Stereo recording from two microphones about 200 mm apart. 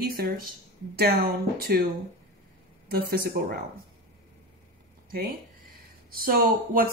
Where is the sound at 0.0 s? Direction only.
50° right (ahead or behind).